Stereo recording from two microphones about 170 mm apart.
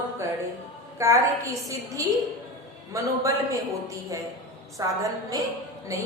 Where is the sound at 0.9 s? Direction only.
15° right (ahead or behind).